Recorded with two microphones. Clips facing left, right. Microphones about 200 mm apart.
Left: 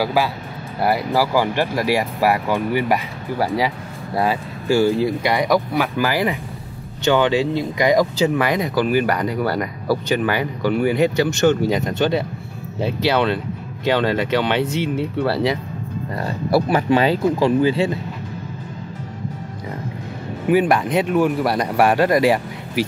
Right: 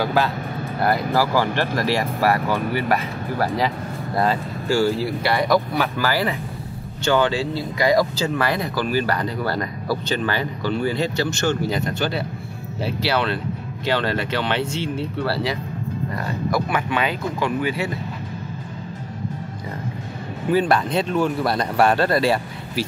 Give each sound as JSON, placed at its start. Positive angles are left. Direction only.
{"t": 0.0, "sound": "speech", "side_deg": 10}
{"t": 16.2, "sound": "speech", "side_deg": 35}
{"t": 20.4, "sound": "speech", "side_deg": 15}